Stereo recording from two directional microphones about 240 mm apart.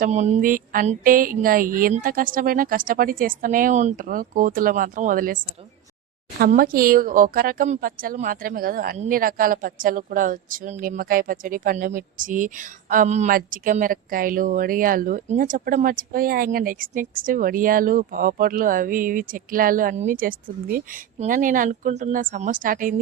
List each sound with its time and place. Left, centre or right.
0.0 s speech: right